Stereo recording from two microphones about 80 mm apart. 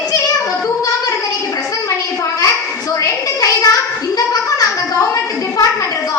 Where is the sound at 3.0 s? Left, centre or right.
Left.